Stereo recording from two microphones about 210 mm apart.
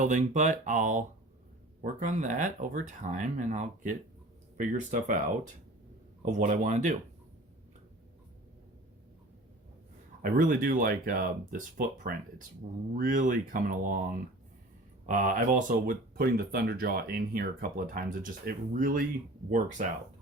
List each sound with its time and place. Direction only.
0.0 s speech: 35° right (ahead or behind)
6.2 s speech: 35° right (ahead or behind)
10.3 s speech: 40° right (ahead or behind)